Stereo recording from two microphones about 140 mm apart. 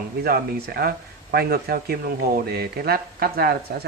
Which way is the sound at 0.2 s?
90° right.